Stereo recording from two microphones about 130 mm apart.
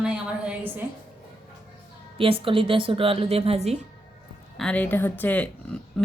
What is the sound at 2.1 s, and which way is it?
A woman's voice, 45° right (ahead or behind).